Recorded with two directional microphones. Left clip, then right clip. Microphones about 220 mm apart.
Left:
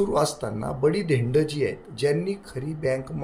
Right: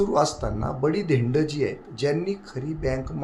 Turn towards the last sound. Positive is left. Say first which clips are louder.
# left 2 dB
turn(degrees=-5)  # may be behind; listen again after turning